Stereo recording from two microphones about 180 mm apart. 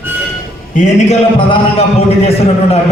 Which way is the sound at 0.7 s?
40° left (ahead or behind).